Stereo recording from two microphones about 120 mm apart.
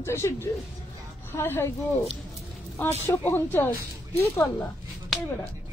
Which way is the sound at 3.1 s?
15° left (ahead or behind).